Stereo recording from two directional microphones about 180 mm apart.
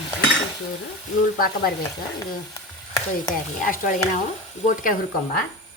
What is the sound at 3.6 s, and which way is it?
Speech, 50° left (ahead or behind).